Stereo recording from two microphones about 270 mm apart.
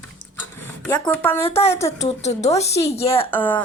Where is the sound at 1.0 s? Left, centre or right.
Centre.